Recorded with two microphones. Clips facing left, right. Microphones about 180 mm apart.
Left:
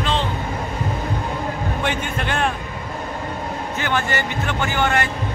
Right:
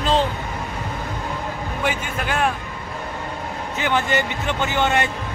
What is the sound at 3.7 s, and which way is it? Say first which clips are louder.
Speech: right 3 dB; 15° right (ahead or behind).